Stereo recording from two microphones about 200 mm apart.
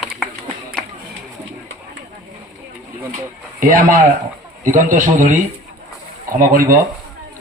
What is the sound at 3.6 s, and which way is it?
A man's voice, 45° right (ahead or behind).